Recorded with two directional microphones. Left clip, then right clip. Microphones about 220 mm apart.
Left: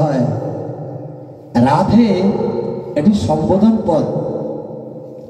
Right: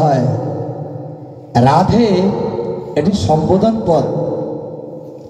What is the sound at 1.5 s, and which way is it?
A man's voice, 30° right (ahead or behind).